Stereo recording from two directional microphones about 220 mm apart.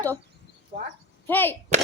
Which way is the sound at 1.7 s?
30° right (ahead or behind).